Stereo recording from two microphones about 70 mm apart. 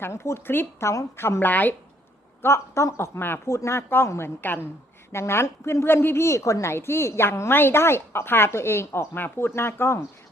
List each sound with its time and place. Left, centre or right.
0.0 s a woman's voice: left
2.4 s a woman's voice: left
3.5 s a woman's voice: left